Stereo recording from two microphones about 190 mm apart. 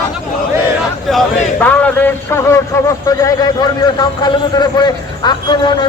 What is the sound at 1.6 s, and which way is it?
A man's voice, 10° left (ahead or behind).